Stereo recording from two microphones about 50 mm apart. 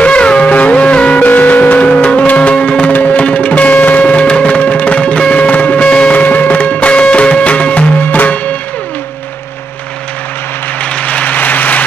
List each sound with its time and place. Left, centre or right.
0.0 s music: left
1.2 s music: left
2.9 s music: left
6.2 s music: left
10.8 s a sound: left